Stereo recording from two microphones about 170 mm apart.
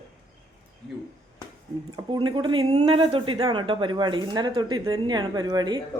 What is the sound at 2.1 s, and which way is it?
A woman's voice, 25° right (ahead or behind).